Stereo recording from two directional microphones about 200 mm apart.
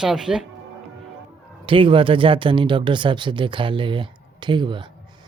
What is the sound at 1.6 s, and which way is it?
Speech, 25° right (ahead or behind).